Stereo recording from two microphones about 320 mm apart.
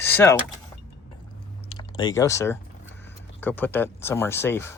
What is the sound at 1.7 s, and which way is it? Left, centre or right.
Typing, centre.